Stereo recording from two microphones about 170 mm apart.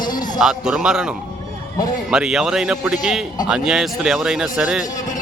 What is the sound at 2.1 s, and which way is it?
A man's voice, 5° right (ahead or behind).